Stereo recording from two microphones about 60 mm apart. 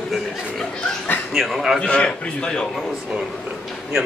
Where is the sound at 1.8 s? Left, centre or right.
Centre.